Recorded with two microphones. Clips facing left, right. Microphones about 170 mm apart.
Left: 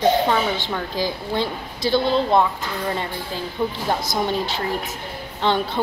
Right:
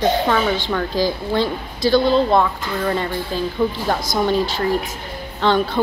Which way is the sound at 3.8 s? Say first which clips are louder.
Right 3 dB; 20° left (ahead or behind).